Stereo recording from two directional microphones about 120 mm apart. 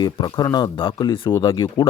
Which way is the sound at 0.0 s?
35° left (ahead or behind).